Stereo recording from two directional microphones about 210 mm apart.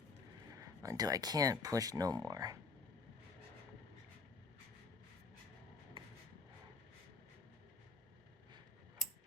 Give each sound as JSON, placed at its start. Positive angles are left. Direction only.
{"t": 0.6, "sound": "speech", "side_deg": -15}